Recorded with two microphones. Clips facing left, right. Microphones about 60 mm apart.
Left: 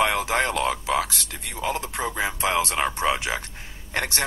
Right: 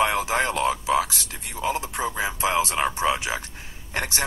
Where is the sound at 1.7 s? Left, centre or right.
Right.